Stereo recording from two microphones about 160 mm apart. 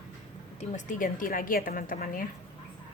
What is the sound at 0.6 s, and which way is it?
A woman's voice, 50° left (ahead or behind).